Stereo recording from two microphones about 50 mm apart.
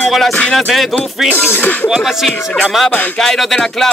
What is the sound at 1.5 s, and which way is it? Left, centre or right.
Speech, left.